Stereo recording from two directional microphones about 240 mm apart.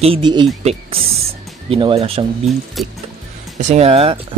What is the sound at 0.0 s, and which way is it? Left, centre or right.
Speech, right.